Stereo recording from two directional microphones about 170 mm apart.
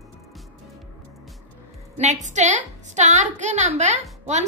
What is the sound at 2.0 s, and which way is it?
A woman's voice, 45° right (ahead or behind).